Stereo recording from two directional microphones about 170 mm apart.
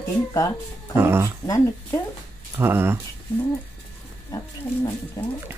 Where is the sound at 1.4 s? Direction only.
20° left (ahead or behind).